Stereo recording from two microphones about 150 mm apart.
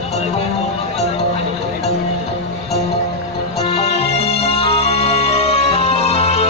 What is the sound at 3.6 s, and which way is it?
Music, 45° left (ahead or behind).